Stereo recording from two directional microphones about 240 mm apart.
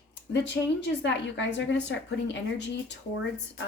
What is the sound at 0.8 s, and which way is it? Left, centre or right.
A woman's voice, left.